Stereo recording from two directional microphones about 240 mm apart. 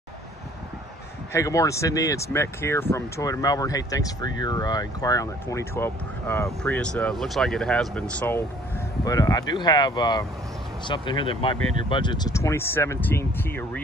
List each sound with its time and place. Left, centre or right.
1.3 s speech: centre